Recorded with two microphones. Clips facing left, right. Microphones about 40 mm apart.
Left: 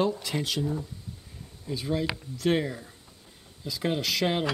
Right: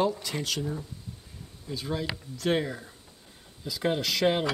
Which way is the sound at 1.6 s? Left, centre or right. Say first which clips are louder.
Left 3 dB; centre.